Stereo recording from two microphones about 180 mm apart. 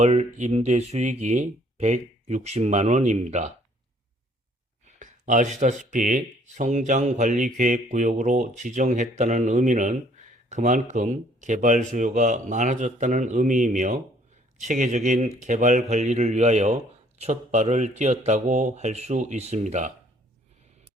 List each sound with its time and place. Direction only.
0.0 s a man's voice: 35° right (ahead or behind)
4.9 s a man's voice: 45° right (ahead or behind)